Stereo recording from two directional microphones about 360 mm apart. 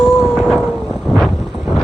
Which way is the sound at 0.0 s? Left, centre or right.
Centre.